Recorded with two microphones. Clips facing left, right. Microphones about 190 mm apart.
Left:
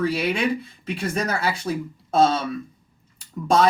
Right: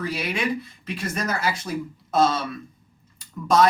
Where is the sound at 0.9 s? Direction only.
30° left (ahead or behind).